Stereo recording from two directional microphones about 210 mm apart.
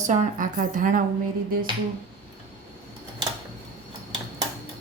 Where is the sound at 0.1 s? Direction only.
40° right (ahead or behind).